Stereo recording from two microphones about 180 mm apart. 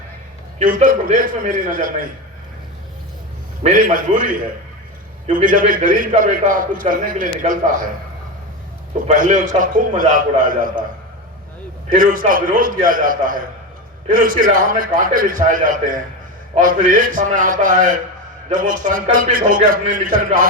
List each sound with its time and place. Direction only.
0.6 s a man's voice: 50° right (ahead or behind)
3.6 s a man's voice: 45° right (ahead or behind)
5.2 s a man's voice: 45° right (ahead or behind)
9.0 s a man's voice: 45° right (ahead or behind)
11.9 s a man's voice: 50° right (ahead or behind)